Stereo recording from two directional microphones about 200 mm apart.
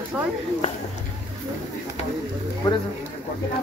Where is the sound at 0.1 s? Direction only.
5° right (ahead or behind).